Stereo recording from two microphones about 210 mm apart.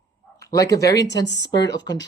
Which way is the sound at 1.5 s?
55° left (ahead or behind).